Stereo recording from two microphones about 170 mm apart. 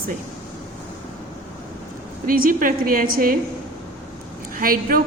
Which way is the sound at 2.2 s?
55° right (ahead or behind).